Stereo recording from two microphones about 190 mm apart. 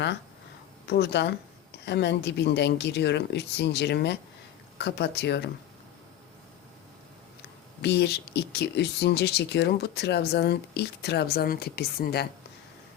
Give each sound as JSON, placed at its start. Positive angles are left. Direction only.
{"t": 0.9, "sound": "speech", "side_deg": 65}
{"t": 7.8, "sound": "speech", "side_deg": 60}